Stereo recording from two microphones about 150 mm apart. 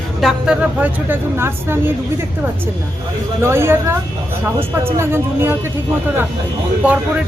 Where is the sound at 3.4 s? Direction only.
15° right (ahead or behind).